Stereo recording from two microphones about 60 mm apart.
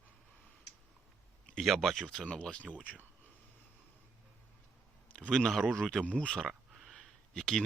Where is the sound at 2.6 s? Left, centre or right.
Right.